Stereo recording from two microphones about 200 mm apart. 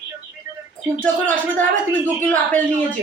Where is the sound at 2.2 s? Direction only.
10° left (ahead or behind).